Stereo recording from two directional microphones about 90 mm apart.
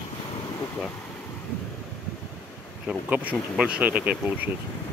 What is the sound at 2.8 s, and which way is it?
Speech, 15° right (ahead or behind).